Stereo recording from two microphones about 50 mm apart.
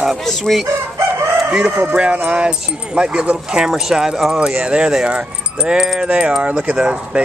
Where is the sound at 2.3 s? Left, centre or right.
Centre.